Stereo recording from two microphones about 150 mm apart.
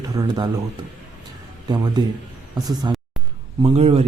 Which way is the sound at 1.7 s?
30° right (ahead or behind).